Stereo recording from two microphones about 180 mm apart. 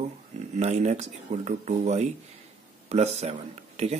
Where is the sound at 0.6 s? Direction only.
40° right (ahead or behind).